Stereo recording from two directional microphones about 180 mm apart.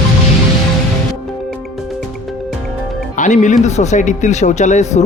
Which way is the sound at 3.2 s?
40° left (ahead or behind).